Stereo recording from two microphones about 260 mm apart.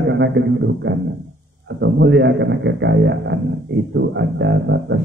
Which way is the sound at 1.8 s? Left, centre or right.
Right.